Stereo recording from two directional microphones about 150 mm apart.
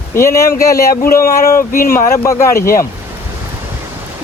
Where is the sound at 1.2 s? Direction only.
75° left (ahead or behind).